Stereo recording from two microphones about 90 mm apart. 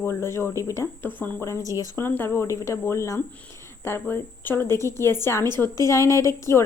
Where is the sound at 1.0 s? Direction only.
20° left (ahead or behind).